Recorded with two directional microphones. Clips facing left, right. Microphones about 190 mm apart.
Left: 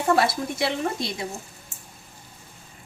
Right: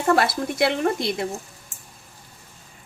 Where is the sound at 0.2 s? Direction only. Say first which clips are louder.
Right 2 dB; 60° right (ahead or behind).